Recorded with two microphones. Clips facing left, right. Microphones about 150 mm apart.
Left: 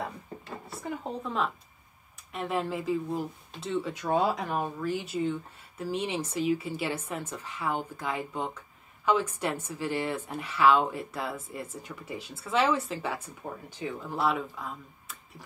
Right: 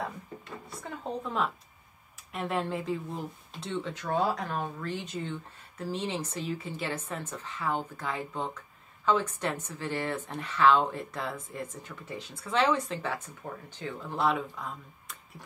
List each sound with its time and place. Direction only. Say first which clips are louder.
0.7 s speech: left 2 dB; centre (ahead or behind)